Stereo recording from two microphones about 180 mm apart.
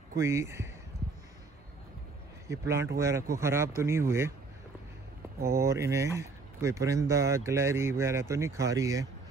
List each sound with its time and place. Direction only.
0.2 s speech: 15° right (ahead or behind)
2.4 s speech: 15° right (ahead or behind)
5.4 s speech: 15° right (ahead or behind)